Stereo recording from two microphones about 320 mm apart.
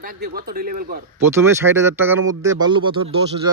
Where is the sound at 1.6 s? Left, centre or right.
Centre.